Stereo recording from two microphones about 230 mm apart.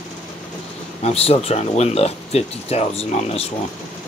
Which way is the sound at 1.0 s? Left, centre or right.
Left.